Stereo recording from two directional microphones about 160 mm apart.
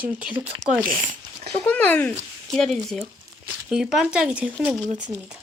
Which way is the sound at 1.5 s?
10° left (ahead or behind).